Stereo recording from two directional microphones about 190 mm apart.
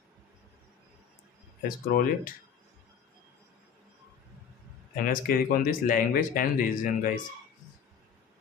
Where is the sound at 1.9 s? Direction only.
50° left (ahead or behind).